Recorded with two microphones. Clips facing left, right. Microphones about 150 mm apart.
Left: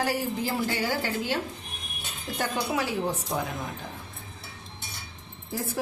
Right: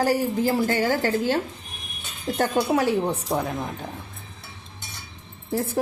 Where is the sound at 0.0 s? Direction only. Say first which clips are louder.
Right 6 dB; 45° right (ahead or behind).